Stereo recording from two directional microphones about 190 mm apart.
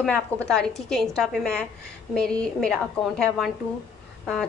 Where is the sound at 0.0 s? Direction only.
5° left (ahead or behind).